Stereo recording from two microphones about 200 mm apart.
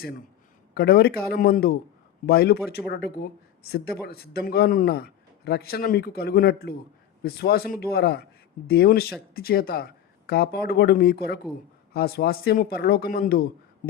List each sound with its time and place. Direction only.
0.7 s a man's voice: 55° left (ahead or behind)